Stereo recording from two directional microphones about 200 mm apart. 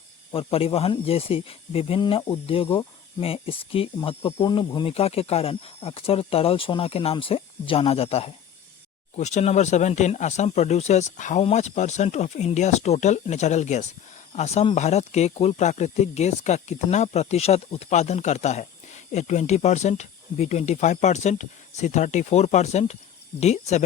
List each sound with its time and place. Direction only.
0.3 s speech: 30° left (ahead or behind)